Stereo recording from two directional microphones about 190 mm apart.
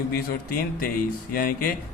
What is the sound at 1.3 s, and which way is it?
Speech, 50° left (ahead or behind).